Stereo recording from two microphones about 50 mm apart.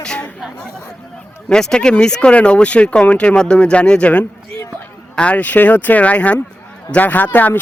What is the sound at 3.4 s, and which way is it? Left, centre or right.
Speech, centre.